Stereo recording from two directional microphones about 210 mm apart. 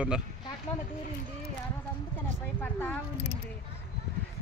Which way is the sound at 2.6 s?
10° left (ahead or behind).